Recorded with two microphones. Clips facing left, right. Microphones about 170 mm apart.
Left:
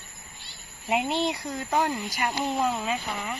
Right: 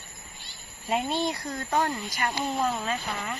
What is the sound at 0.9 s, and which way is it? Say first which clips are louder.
Speech: left 1 dB; 20° left (ahead or behind).